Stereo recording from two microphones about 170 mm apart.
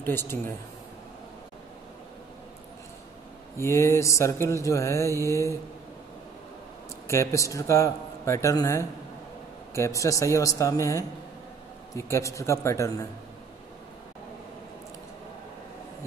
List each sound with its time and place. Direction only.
0.0 s a man's voice: 15° left (ahead or behind)
3.5 s a man's voice: 15° left (ahead or behind)
7.1 s a man's voice: 20° left (ahead or behind)